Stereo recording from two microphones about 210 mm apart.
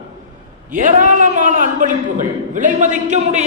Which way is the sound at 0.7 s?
35° right (ahead or behind).